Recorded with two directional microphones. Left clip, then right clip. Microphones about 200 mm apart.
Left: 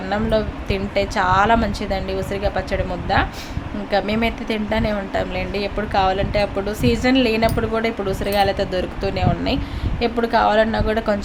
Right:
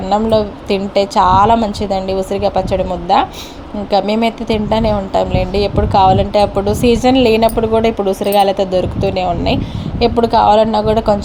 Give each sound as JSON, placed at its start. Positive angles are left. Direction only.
{"t": 0.1, "sound": "a woman's voice", "side_deg": -20}